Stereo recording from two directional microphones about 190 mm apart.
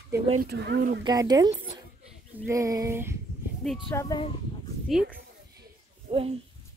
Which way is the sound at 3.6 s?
Centre (ahead or behind).